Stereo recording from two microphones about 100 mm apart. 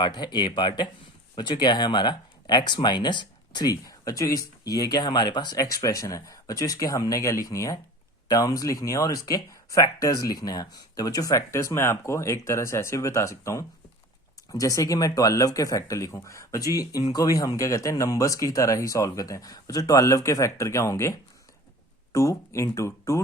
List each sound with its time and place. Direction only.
0.0 s speech: 50° left (ahead or behind); by 23.2 s 30° left (ahead or behind)